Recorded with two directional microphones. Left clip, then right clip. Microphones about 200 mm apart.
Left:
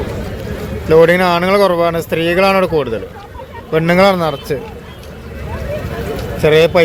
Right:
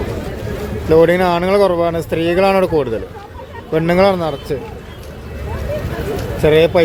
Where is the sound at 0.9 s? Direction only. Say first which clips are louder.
Left 2 dB; 5° right (ahead or behind).